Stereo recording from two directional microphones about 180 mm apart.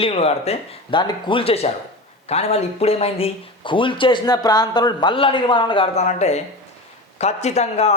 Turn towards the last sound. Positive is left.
turn(degrees=35)  # may be behind; listen again after turning